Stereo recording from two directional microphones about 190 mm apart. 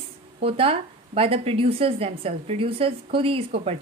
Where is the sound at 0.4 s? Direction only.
30° right (ahead or behind).